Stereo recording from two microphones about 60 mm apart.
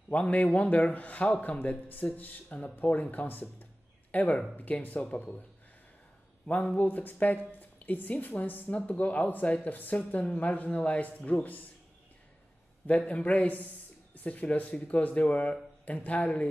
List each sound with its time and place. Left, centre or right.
0.1 s speech: left
6.4 s speech: left
12.8 s speech: left